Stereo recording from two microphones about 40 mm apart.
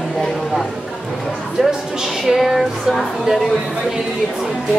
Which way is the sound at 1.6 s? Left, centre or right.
Centre.